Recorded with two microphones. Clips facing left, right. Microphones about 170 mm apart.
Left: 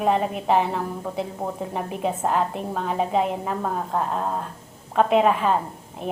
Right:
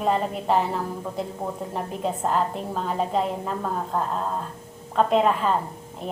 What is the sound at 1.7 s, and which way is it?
A woman's voice, 5° left (ahead or behind).